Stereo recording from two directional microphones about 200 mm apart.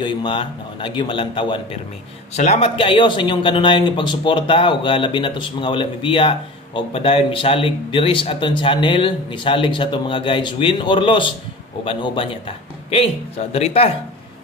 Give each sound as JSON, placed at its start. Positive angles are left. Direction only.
{"t": 0.0, "sound": "speech", "side_deg": 25}